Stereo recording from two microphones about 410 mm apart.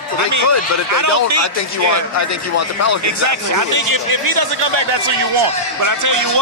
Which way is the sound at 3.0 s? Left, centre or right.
Right.